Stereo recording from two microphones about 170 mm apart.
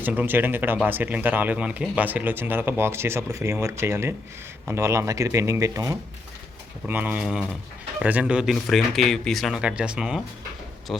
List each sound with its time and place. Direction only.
0.0 s speech: 10° right (ahead or behind)